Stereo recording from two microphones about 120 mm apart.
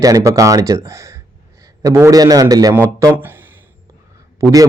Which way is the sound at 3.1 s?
15° right (ahead or behind).